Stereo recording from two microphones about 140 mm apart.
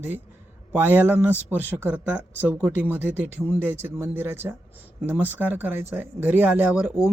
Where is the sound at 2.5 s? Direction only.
15° left (ahead or behind).